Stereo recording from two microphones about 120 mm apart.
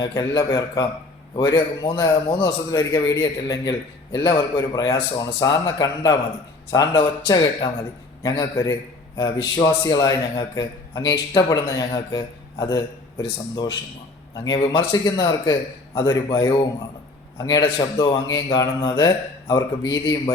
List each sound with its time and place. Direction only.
0.0 s a man's voice: 30° left (ahead or behind)
14.4 s a man's voice: 35° left (ahead or behind)